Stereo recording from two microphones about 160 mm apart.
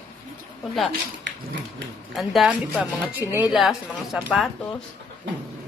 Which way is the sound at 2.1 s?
Centre (ahead or behind).